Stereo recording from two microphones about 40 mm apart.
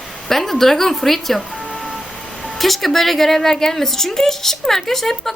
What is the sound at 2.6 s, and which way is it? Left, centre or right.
A woman's voice, centre.